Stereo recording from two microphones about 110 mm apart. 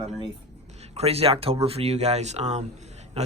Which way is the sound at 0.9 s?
65° right (ahead or behind).